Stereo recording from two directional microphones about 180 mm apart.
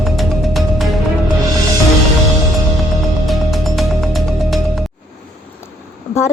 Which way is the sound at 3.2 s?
Centre (ahead or behind).